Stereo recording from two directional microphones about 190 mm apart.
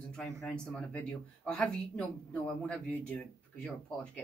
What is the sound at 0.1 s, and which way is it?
A man's voice, 5° left (ahead or behind).